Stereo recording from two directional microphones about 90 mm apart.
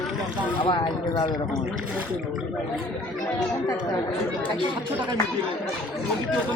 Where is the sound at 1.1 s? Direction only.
50° left (ahead or behind).